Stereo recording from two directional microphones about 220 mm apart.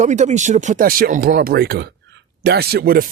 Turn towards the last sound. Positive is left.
turn(degrees=-45)  # may be behind; listen again after turning